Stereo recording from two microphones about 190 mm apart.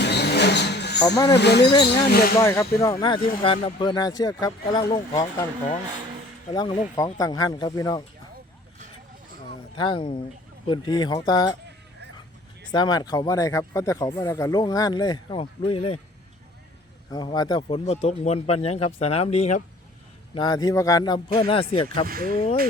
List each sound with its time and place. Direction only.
0.0 s vehicle: 60° left (ahead or behind)
0.9 s speech: 20° left (ahead or behind)
1.4 s speech: 60° left (ahead or behind)
2.4 s speech: 15° left (ahead or behind)
6.5 s speech: 20° left (ahead or behind)
9.7 s speech: 25° left (ahead or behind)
12.7 s speech: 20° left (ahead or behind)
17.1 s speech: 20° left (ahead or behind)
20.3 s speech: 20° left (ahead or behind)